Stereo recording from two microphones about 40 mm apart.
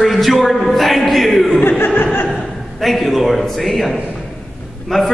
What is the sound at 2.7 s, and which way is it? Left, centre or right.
A man's voice, centre.